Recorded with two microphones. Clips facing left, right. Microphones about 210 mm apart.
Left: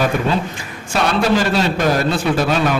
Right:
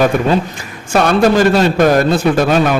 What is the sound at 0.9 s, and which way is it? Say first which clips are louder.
A man's voice: right 5 dB; 50° right (ahead or behind).